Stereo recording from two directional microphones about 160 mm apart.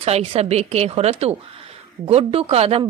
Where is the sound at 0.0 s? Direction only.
40° right (ahead or behind).